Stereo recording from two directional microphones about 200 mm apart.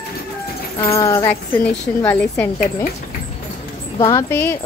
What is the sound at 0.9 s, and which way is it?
Speech, 15° left (ahead or behind).